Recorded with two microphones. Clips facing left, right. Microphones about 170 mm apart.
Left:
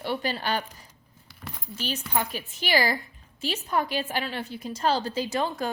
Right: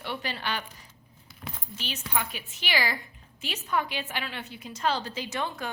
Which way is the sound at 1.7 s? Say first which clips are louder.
Left 4 dB; 40° left (ahead or behind).